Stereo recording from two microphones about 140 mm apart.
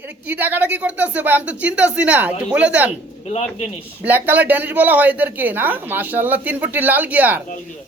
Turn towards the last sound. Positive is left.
turn(degrees=-10)  # may be behind; listen again after turning